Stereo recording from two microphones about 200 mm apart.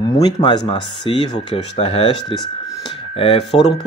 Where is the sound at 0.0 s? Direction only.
20° left (ahead or behind).